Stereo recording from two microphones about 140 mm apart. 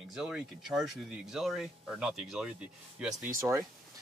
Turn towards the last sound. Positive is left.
turn(degrees=-20)  # may be behind; listen again after turning